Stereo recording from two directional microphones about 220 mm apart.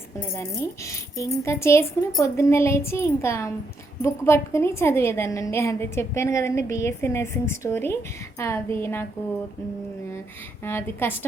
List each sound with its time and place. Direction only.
0.3 s a woman's voice: 15° left (ahead or behind)
10.6 s a woman's voice: 10° left (ahead or behind)